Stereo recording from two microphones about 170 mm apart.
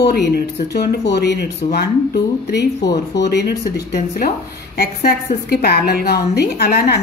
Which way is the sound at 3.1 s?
80° left.